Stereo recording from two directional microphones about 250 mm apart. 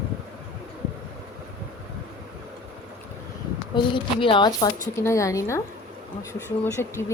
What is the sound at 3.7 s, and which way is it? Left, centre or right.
Speech, centre.